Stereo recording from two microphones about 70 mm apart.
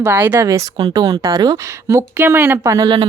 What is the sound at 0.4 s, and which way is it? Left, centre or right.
Speech, right.